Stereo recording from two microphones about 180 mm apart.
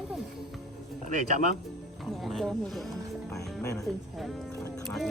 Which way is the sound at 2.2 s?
Centre (ahead or behind).